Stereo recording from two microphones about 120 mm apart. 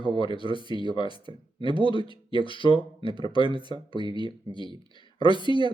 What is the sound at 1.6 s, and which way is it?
Speech, 45° left (ahead or behind).